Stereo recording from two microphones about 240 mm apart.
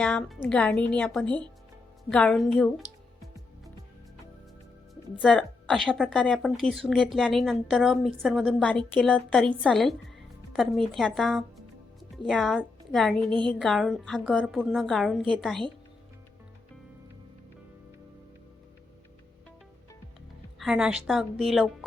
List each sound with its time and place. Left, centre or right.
0.0 s a woman's voice: centre
5.2 s a woman's voice: centre
20.6 s a woman's voice: centre